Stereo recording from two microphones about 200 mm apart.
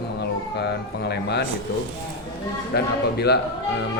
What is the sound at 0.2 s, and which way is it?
Speech, 55° left (ahead or behind).